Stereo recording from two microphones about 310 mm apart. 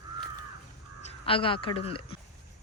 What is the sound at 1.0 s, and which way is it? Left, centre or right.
Speech, centre.